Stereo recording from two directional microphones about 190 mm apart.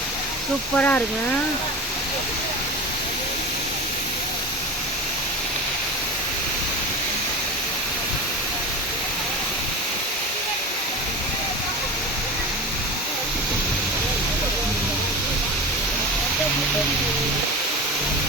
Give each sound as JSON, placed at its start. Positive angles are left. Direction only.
{"t": 0.8, "sound": "speech", "side_deg": 10}